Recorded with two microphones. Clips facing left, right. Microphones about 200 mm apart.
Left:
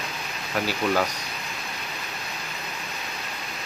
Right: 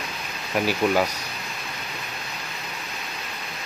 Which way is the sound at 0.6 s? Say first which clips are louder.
Right 3 dB; 15° right (ahead or behind).